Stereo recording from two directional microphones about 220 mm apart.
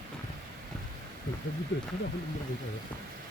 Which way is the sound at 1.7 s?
55° left (ahead or behind).